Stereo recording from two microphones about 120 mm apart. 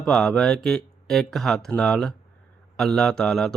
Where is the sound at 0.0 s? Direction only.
5° left (ahead or behind).